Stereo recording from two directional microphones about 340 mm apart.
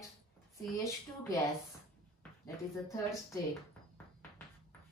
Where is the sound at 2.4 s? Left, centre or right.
Centre.